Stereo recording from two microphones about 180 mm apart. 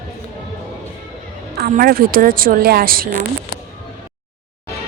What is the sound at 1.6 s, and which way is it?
A woman's voice, 55° right (ahead or behind).